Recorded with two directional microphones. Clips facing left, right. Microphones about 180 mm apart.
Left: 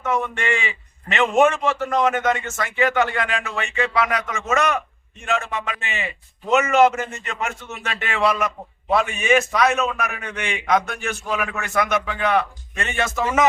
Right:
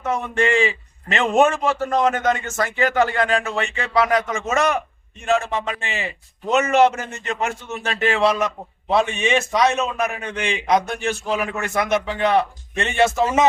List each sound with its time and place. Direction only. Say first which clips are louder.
0.0 s a man's voice: right 2 dB; 35° right (ahead or behind)